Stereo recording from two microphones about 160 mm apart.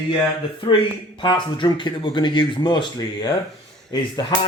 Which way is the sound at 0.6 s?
30° left (ahead or behind).